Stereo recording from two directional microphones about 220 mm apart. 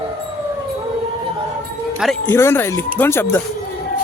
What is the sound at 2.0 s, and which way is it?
Speech, 10° left (ahead or behind).